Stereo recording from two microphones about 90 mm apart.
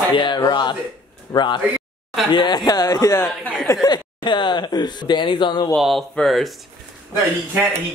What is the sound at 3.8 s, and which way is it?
Speech, 55° left (ahead or behind).